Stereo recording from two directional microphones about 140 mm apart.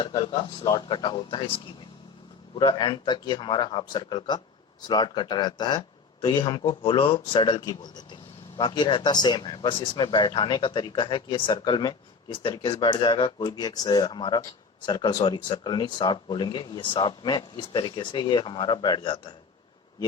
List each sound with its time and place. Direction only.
0.0 s a man's voice: 30° left (ahead or behind)